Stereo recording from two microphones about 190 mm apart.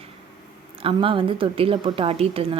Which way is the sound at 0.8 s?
30° right (ahead or behind).